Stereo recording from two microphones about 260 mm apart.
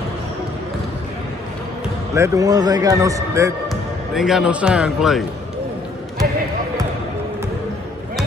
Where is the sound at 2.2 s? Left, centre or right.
Centre.